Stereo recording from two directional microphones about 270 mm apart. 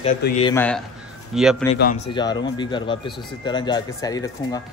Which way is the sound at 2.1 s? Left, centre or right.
Centre.